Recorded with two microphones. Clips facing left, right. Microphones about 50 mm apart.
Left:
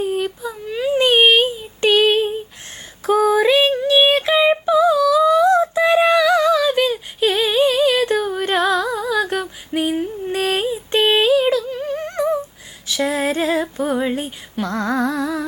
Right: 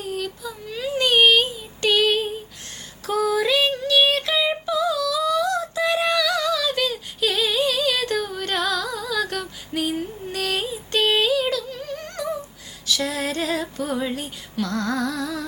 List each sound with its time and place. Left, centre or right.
0.0 s child singing: left
3.1 s female singing: left
4.6 s a sound: left
12.9 s female singing: left